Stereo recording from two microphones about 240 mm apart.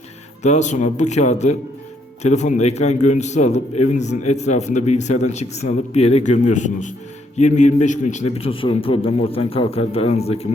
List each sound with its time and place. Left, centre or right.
0.4 s a man's voice: left